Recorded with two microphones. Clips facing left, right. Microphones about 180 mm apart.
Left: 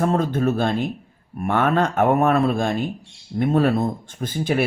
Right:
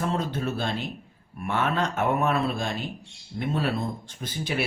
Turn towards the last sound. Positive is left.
turn(degrees=50)  # may be behind; listen again after turning